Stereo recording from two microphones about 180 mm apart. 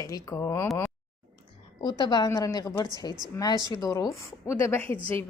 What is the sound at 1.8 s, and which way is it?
A woman's voice, 25° left (ahead or behind).